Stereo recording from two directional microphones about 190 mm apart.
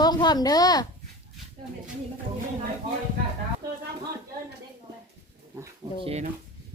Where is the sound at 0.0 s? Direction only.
20° left (ahead or behind).